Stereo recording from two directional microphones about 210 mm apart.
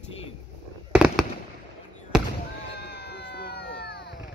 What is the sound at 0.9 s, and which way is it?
Fireworks, 5° right (ahead or behind).